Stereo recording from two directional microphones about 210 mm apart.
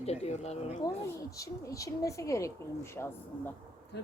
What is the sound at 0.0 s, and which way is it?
Speech, 30° left (ahead or behind).